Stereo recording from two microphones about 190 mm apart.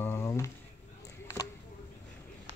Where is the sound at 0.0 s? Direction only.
15° left (ahead or behind).